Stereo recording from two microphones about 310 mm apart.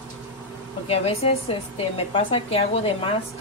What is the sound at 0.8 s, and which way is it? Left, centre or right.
A woman's voice, centre.